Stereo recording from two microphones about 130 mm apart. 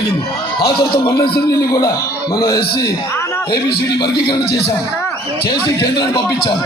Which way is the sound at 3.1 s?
20° left (ahead or behind).